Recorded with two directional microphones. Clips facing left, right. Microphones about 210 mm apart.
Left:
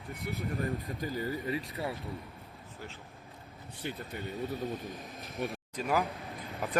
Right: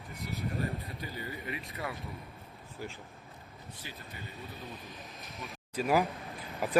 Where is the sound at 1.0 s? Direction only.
40° left (ahead or behind).